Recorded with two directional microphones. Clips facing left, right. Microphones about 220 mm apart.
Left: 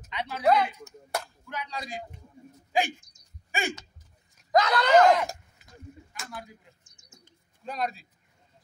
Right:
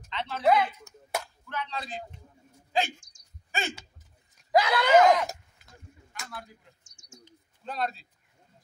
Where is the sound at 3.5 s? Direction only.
15° left (ahead or behind).